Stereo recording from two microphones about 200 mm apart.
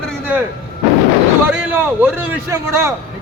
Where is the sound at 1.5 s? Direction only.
10° right (ahead or behind).